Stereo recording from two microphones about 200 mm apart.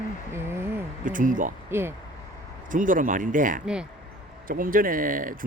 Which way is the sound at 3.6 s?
5° right (ahead or behind).